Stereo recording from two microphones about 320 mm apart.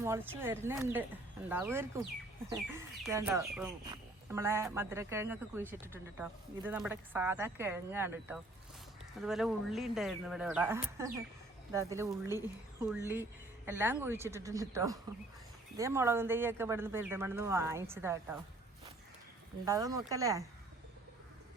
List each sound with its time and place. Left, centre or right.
0.0 s speech: centre
13.7 s speech: centre
19.6 s speech: centre